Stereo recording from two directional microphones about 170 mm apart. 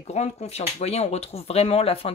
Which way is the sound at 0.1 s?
40° left (ahead or behind).